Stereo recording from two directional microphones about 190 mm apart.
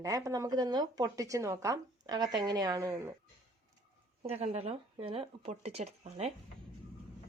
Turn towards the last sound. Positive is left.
turn(degrees=-30)  # may be behind; listen again after turning